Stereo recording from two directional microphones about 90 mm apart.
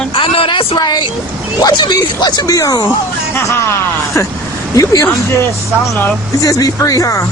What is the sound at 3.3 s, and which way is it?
Speech, 30° left (ahead or behind).